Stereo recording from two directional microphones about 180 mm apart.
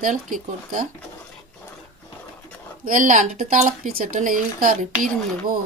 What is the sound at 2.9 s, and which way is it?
Speech, 45° right (ahead or behind).